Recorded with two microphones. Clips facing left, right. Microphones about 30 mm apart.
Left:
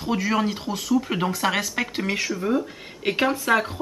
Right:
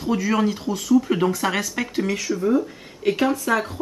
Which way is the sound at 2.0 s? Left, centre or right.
Left.